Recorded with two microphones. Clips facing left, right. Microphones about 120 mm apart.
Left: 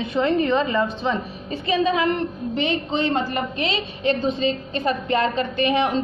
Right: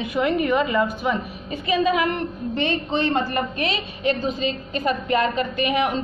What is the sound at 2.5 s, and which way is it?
A woman's voice, 15° left (ahead or behind).